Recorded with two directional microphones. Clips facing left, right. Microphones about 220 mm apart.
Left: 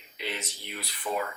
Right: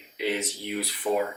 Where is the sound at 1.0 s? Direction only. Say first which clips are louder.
Right 6 dB; 15° right (ahead or behind).